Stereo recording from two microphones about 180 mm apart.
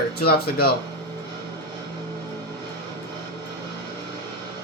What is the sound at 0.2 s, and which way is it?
Speech, 60° left (ahead or behind).